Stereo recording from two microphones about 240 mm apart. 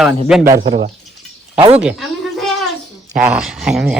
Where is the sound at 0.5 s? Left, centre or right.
Centre.